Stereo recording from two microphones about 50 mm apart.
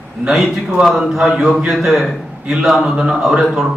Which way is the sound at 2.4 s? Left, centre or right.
Centre.